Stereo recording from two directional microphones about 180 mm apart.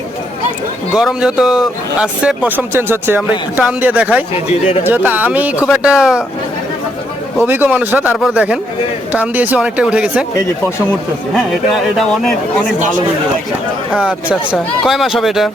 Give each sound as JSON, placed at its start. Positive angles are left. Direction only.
{"t": 0.9, "sound": "speech", "side_deg": -5}
{"t": 7.4, "sound": "speech", "side_deg": -10}
{"t": 11.8, "sound": "speech", "side_deg": 0}
{"t": 13.9, "sound": "speech", "side_deg": -5}